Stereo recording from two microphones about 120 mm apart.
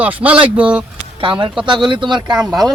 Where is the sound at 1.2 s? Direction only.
45° right (ahead or behind).